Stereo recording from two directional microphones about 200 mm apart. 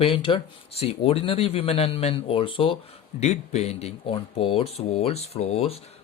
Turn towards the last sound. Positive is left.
turn(degrees=30)  # may be behind; listen again after turning